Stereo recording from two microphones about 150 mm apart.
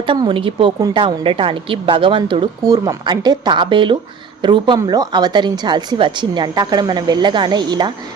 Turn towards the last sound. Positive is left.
turn(degrees=-30)  # may be behind; listen again after turning